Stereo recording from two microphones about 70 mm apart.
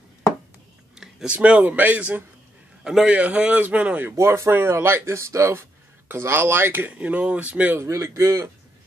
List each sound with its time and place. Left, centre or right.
0.9 s a sound: centre
1.3 s a man's voice: centre
2.8 s a man's voice: centre
3.1 s a man's voice: centre
4.2 s speech: right
6.9 s a man's voice: centre
7.8 s speech: right